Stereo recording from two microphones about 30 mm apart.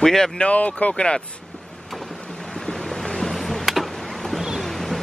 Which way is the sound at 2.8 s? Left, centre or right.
Centre.